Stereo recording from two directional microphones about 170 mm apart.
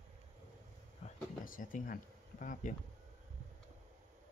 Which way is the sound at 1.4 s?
50° left (ahead or behind).